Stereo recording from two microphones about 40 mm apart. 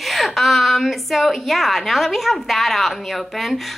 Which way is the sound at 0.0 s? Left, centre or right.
Centre.